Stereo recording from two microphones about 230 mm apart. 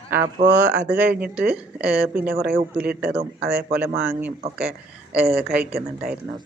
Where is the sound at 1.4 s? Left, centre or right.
Centre.